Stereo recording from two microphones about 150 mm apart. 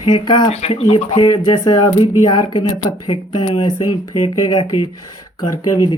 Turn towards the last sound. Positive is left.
turn(degrees=25)  # may be behind; listen again after turning